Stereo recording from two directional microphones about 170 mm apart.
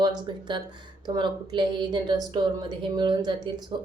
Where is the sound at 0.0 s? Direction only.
25° right (ahead or behind).